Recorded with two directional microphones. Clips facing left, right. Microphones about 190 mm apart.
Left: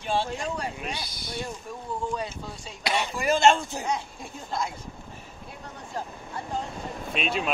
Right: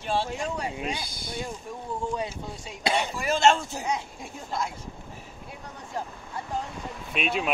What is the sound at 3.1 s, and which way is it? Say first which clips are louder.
Speech: left 3 dB; centre (ahead or behind).